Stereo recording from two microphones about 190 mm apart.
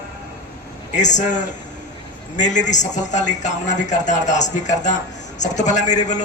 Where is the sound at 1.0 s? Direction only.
40° left (ahead or behind).